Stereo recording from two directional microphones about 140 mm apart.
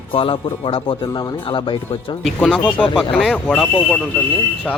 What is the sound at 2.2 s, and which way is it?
Speech, 5° left (ahead or behind).